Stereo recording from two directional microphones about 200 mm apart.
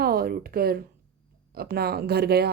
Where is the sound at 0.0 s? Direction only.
50° right (ahead or behind).